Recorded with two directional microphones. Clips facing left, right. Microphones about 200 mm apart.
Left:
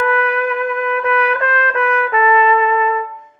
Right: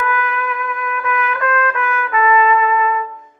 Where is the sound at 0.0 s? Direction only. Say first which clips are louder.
Left 5 dB; 35° left (ahead or behind).